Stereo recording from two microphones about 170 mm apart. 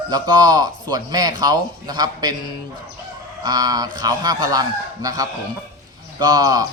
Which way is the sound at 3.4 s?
20° right (ahead or behind).